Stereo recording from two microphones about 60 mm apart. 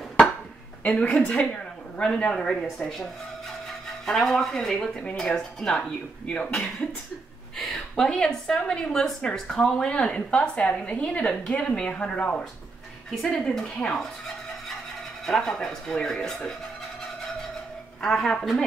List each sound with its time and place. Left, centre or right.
0.8 s a woman's voice: centre
4.0 s a woman's voice: centre
7.5 s a woman's voice: centre
15.2 s a woman's voice: centre
18.0 s a woman's voice: centre